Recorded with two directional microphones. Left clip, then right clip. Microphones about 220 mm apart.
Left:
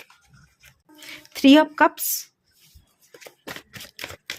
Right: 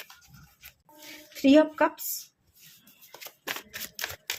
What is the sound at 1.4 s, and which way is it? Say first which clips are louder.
Speech: left 5 dB; 50° left (ahead or behind).